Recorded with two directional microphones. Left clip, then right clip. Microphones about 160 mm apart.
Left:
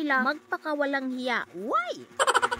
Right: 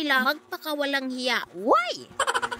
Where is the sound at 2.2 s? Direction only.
Centre (ahead or behind).